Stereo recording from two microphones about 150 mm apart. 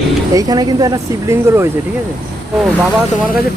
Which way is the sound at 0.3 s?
25° right (ahead or behind).